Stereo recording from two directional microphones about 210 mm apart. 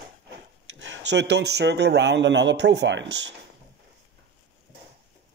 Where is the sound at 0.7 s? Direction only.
65° right (ahead or behind).